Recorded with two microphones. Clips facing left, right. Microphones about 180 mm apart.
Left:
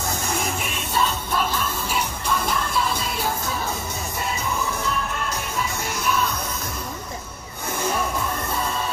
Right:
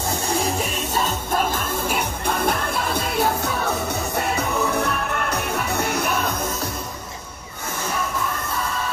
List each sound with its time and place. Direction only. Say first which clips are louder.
0.3 s music: right 4 dB; 35° right (ahead or behind); by 6.3 s 60° right (ahead or behind)